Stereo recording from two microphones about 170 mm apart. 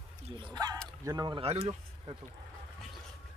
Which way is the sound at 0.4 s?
20° right (ahead or behind).